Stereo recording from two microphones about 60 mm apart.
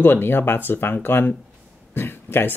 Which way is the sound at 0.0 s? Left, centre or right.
Left.